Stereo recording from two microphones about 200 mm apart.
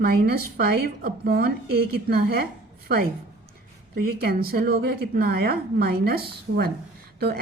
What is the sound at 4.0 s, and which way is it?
A woman's voice, 50° right (ahead or behind).